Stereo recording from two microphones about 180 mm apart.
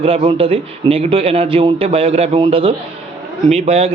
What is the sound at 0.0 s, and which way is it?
Speech, 30° right (ahead or behind).